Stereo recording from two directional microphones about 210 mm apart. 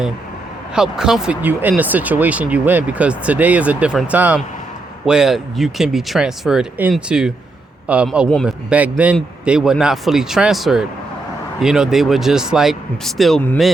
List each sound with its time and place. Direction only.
0.8 s speech: 5° right (ahead or behind)